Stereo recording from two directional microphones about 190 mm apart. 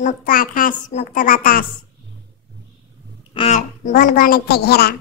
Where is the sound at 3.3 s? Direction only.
35° left (ahead or behind); by 4.9 s 55° left (ahead or behind).